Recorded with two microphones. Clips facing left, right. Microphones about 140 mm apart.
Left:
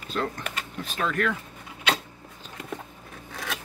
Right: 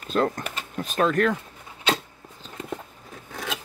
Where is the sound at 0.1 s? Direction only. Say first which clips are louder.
Right 6 dB; 40° right (ahead or behind).